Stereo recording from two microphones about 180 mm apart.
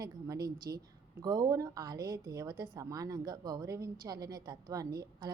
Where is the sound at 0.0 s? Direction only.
20° right (ahead or behind).